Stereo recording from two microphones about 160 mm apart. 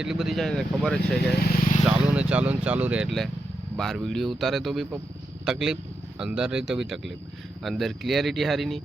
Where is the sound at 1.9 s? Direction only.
5° right (ahead or behind).